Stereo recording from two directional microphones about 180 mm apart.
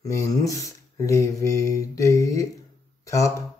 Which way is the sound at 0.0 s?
20° left (ahead or behind).